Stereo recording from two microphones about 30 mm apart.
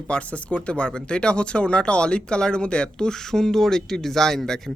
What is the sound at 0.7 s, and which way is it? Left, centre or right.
Speech, left.